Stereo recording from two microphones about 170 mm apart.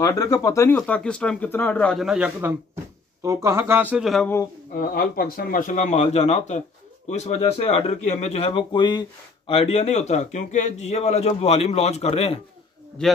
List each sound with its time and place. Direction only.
0.0 s speech: 20° left (ahead or behind)
2.0 s speech: 5° right (ahead or behind)
4.9 s speech: 60° left (ahead or behind); by 12.4 s 40° left (ahead or behind)
13.0 s a man's voice: 5° left (ahead or behind)